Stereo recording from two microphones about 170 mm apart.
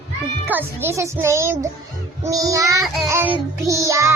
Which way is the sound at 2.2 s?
20° right (ahead or behind).